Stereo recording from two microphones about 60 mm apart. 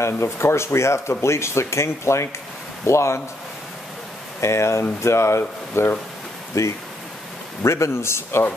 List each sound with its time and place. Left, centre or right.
0.0 s speech: left
4.4 s speech: left